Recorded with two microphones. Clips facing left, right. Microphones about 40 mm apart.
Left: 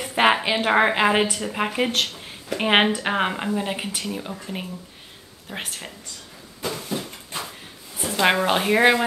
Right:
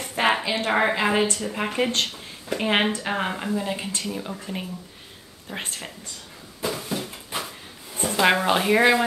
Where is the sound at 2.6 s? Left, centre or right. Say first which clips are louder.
Left 4 dB; left.